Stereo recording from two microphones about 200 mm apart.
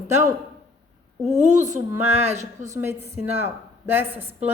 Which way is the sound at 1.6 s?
15° right (ahead or behind).